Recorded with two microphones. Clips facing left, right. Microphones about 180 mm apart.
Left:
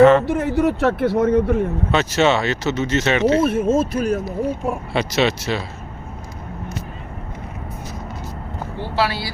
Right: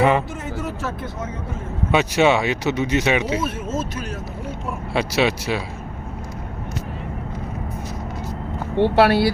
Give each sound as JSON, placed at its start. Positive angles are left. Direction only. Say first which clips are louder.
{"t": 0.0, "sound": "speech", "louder": "left 7 dB", "side_deg": -10}
{"t": 0.3, "sound": "speech", "louder": "left 11 dB", "side_deg": 65}
{"t": 1.9, "sound": "speech", "louder": "right 2 dB", "side_deg": -10}
{"t": 3.7, "sound": "speech", "louder": "left 8 dB", "side_deg": 30}
{"t": 4.9, "sound": "speech", "louder": "right 1 dB", "side_deg": -10}
{"t": 8.8, "sound": "speech", "louder": "right 8 dB", "side_deg": -60}